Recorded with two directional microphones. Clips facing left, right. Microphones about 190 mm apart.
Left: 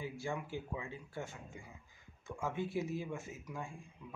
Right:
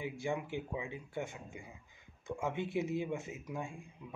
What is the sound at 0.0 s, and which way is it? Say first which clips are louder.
Speech: right 3 dB; 20° right (ahead or behind).